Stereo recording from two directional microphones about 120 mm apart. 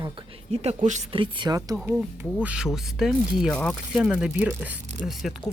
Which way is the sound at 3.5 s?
10° left (ahead or behind).